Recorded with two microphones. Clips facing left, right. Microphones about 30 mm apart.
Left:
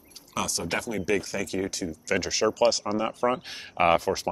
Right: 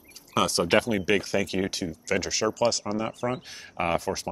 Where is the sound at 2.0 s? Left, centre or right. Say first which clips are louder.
Left 1 dB; centre.